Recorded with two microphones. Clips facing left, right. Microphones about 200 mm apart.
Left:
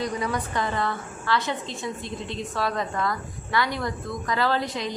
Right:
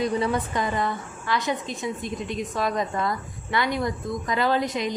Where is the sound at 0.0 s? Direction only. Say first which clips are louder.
Right 4 dB; 25° right (ahead or behind).